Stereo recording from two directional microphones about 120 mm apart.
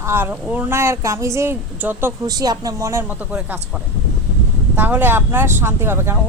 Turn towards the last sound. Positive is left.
turn(degrees=-20)  # may be behind; listen again after turning